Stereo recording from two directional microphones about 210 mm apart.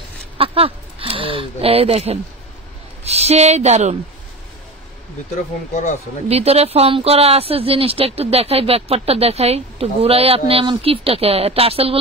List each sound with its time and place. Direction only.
0.4 s speech: 25° right (ahead or behind)
6.2 s speech: 30° right (ahead or behind)